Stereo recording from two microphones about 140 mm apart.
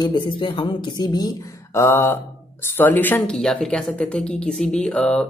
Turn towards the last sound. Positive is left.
turn(degrees=5)  # may be behind; listen again after turning